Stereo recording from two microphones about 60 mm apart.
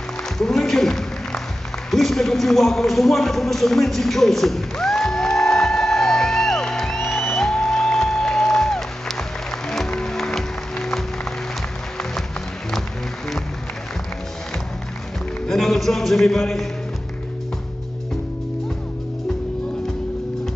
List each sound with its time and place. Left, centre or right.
0.4 s a sound: centre
9.8 s music: centre
15.4 s music: centre